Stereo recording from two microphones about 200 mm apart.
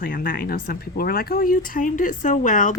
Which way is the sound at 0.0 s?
45° left (ahead or behind).